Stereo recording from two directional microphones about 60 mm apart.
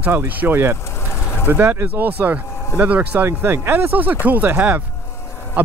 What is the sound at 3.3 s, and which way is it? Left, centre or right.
Speech, right.